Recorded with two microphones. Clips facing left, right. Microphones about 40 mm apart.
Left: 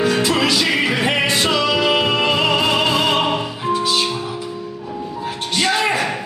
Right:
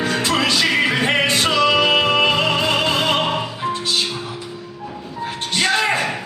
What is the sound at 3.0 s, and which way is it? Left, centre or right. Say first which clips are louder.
Music: left 1 dB; centre.